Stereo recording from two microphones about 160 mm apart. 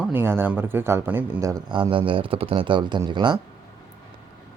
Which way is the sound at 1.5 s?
25° right (ahead or behind).